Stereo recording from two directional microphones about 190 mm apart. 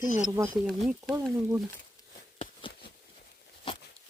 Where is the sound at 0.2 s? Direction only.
15° right (ahead or behind).